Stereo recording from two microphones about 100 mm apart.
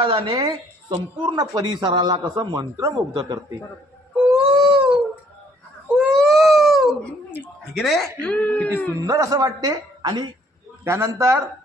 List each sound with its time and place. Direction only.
0.0 s a woman's voice: 60° right (ahead or behind)
0.4 s speech: 40° right (ahead or behind)
2.5 s a woman's voice: 35° right (ahead or behind)
4.2 s a sound: 10° right (ahead or behind)
4.7 s dog: 55° right (ahead or behind)
5.9 s baby cry: 5° right (ahead or behind)
7.7 s speech: centre (ahead or behind)
9.0 s a woman's voice: 30° right (ahead or behind); by 10.3 s 45° right (ahead or behind)
10.8 s a man's voice: 30° right (ahead or behind)